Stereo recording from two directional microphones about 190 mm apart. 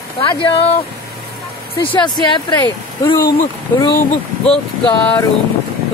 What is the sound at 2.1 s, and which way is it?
Speech, 20° left (ahead or behind).